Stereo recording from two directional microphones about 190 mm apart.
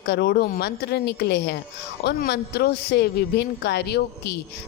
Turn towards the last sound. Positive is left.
turn(degrees=60)  # may be behind; listen again after turning